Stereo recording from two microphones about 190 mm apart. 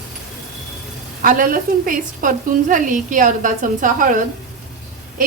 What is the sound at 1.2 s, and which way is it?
A woman's voice, 45° right (ahead or behind).